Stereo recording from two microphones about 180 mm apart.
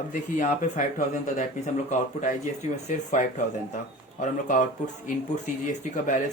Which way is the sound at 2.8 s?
40° left (ahead or behind).